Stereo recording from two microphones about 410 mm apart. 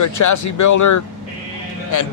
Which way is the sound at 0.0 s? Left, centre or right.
Left.